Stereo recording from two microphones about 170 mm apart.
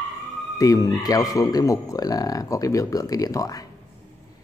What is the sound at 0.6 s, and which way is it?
Speech, 20° left (ahead or behind).